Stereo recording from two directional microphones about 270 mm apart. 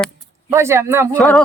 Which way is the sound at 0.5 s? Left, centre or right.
Centre.